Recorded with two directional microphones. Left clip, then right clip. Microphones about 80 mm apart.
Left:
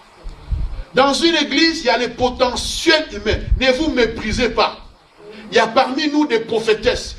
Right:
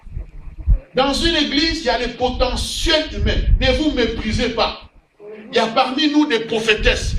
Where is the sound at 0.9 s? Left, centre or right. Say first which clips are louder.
Left 3 dB; left.